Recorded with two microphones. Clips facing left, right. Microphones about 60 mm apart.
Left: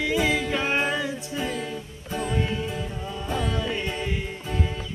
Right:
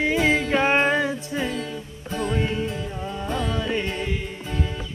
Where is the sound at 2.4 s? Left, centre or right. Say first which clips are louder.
Right 1 dB; centre.